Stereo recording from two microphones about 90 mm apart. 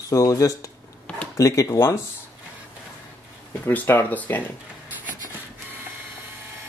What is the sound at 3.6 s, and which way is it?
Speech, 25° left (ahead or behind).